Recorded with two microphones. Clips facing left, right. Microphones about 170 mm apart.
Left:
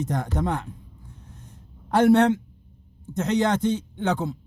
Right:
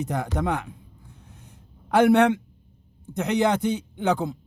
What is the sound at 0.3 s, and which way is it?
Speech, 65° right (ahead or behind).